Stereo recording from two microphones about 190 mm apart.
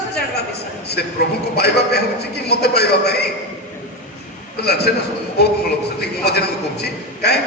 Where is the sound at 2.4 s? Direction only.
55° left (ahead or behind).